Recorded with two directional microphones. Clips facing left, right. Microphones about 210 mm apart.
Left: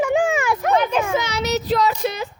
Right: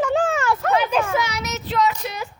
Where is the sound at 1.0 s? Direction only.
25° left (ahead or behind).